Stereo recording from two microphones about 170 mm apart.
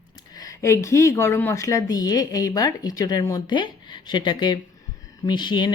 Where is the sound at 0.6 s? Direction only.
15° left (ahead or behind).